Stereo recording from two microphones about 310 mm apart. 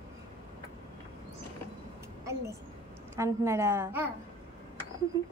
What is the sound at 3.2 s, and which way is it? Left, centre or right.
Speech, centre.